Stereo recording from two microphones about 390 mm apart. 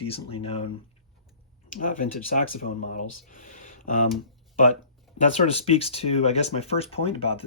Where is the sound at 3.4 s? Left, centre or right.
Centre.